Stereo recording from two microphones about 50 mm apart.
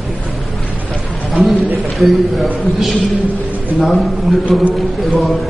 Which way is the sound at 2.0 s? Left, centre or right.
Centre.